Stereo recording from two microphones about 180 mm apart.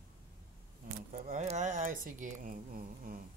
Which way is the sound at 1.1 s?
40° right (ahead or behind).